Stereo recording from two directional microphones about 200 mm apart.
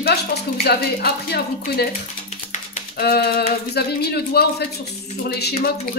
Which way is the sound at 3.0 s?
50° left (ahead or behind).